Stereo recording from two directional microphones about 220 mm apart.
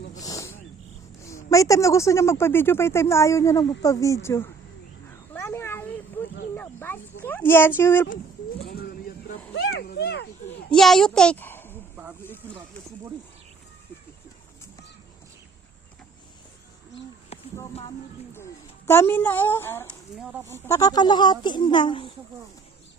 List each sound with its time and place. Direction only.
0.2 s wild animals: 15° left (ahead or behind)
1.5 s speech: 15° left (ahead or behind)
5.3 s a sound: 10° left (ahead or behind)
7.8 s speech: 10° left (ahead or behind)
8.1 s a sound: 40° left (ahead or behind)
10.7 s a child's voice: centre (ahead or behind)
18.9 s speech: 10° left (ahead or behind)